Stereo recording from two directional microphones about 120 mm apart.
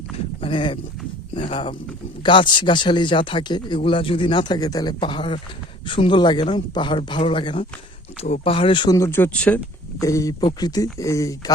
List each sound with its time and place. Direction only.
0.3 s clip-clop: 45° left (ahead or behind)
2.2 s speech: 40° left (ahead or behind)
8.9 s speech: 20° left (ahead or behind)
9.3 s speech: 10° left (ahead or behind)
10.0 s speech: 25° left (ahead or behind)